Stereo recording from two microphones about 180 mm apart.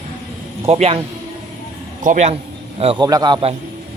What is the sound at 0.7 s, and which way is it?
Speech, 35° right (ahead or behind).